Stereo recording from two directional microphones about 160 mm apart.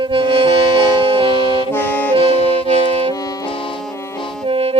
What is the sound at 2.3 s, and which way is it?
Music, 35° left (ahead or behind).